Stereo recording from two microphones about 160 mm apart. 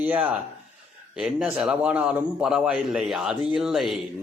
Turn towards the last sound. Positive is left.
turn(degrees=0)  # may be behind; listen again after turning